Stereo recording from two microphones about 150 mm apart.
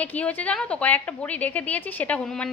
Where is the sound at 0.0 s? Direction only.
10° left (ahead or behind).